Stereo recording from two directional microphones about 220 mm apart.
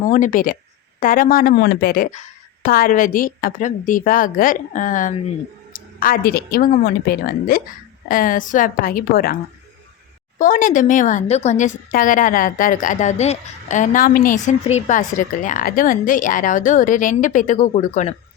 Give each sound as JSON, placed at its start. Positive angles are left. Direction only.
{"t": 0.0, "sound": "a woman's voice", "side_deg": 35}